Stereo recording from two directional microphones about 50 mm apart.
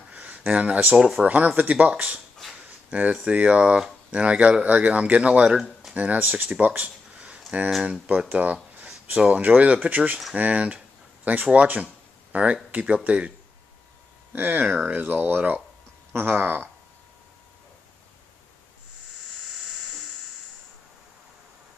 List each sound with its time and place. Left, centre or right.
0.1 s a sound: right
0.5 s speech: right
0.9 s speech: centre
1.2 s speech: right
5.6 s a sound: centre
5.9 s speech: right
11.6 s a sound: right
12.7 s speech: right
14.3 s speech: right